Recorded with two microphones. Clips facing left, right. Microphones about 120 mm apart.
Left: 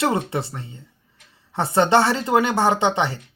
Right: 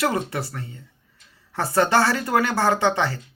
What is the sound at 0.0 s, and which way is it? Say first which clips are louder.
Speech: left 2 dB; 25° left (ahead or behind).